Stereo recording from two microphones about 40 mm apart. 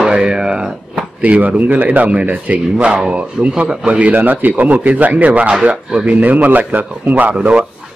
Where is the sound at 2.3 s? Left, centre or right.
Right.